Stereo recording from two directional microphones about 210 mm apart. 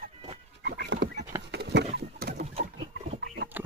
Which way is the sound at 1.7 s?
55° right (ahead or behind).